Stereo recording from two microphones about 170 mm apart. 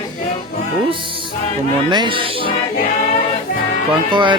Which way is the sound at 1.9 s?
30° right (ahead or behind).